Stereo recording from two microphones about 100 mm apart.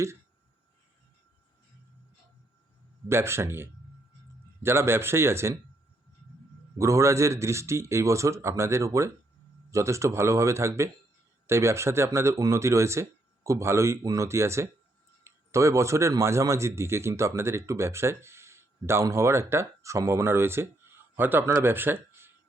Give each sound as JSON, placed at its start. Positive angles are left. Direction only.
{"t": 3.1, "sound": "speech", "side_deg": -25}
{"t": 6.7, "sound": "speech", "side_deg": -30}